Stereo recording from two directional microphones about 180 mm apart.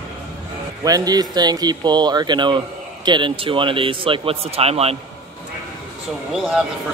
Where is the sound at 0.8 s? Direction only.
20° right (ahead or behind).